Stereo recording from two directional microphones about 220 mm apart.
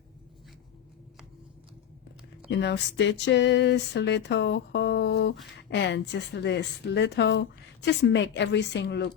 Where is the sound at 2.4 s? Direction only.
50° left (ahead or behind).